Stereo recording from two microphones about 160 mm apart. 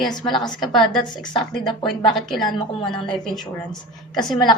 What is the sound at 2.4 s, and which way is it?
Speech, 30° left (ahead or behind).